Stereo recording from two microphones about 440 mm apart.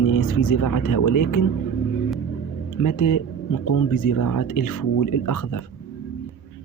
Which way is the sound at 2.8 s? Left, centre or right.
Left.